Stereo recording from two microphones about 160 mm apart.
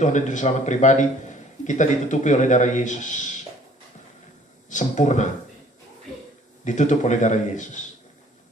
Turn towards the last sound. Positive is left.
turn(degrees=50)  # may be behind; listen again after turning